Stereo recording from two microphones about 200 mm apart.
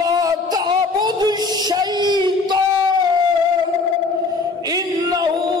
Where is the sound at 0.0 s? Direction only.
20° right (ahead or behind).